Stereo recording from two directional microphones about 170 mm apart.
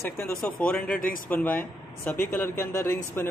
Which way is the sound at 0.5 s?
5° left (ahead or behind).